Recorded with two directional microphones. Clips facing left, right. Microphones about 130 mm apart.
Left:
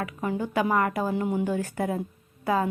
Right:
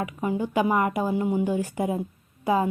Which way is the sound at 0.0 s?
15° right (ahead or behind).